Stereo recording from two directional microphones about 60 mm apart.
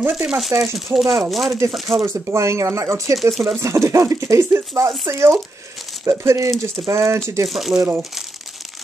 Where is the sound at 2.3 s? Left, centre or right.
Right.